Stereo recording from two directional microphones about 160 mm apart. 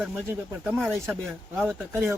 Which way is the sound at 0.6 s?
15° right (ahead or behind).